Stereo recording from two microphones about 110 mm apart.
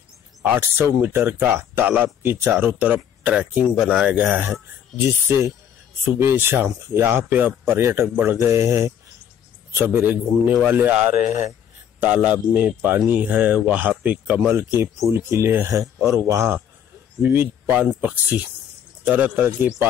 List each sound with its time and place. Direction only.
0.4 s speech: 20° right (ahead or behind)
6.1 s speech: 20° right (ahead or behind)
14.5 s speech: 25° right (ahead or behind)